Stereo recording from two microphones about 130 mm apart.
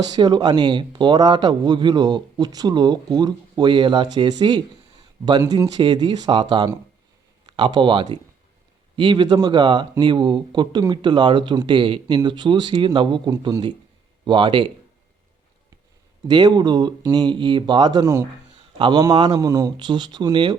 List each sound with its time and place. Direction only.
0.0 s speech: 30° right (ahead or behind)
16.2 s a man's voice: 30° right (ahead or behind)